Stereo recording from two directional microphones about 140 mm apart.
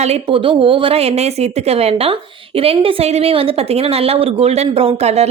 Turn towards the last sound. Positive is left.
turn(degrees=-50)  # may be behind; listen again after turning